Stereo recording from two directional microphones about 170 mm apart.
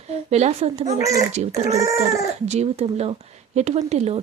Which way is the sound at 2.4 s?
40° right (ahead or behind).